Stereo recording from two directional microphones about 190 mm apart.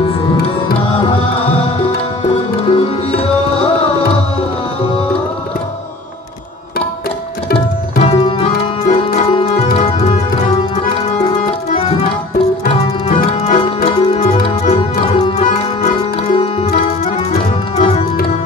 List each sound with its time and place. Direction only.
2.7 s music: 30° left (ahead or behind)
8.0 s tabla: 30° left (ahead or behind)
12.6 s music: 35° left (ahead or behind)